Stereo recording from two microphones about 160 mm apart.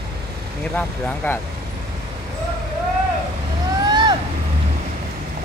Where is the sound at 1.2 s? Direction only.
15° left (ahead or behind).